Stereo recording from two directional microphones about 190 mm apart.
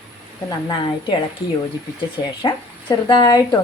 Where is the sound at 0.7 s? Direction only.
25° left (ahead or behind).